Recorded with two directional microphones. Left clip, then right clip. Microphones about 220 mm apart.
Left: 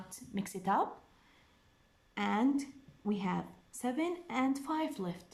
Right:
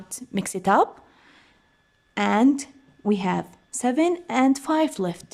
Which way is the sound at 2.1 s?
50° right (ahead or behind).